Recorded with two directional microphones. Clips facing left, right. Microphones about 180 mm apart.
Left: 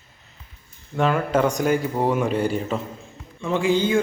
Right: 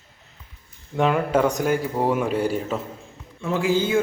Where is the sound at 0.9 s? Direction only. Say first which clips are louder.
Right 1 dB; 15° right (ahead or behind).